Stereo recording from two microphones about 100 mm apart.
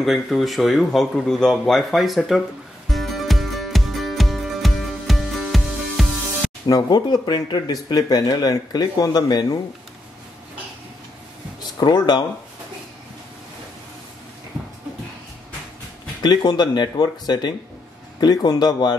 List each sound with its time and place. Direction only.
0.0 s speech: centre (ahead or behind)
2.9 s music: centre (ahead or behind)
6.7 s speech: 40° left (ahead or behind)
11.8 s speech: 45° left (ahead or behind)
16.2 s speech: 45° left (ahead or behind)